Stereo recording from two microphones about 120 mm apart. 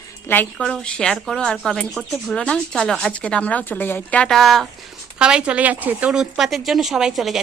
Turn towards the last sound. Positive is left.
turn(degrees=0)  # may be behind; listen again after turning